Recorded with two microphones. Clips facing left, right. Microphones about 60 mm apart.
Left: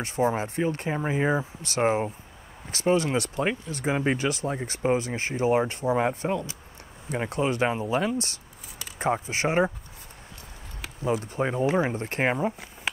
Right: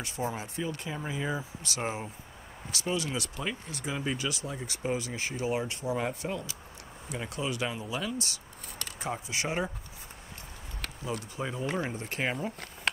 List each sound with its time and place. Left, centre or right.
0.0 s speech: left
11.3 s speech: left
12.9 s a sound: centre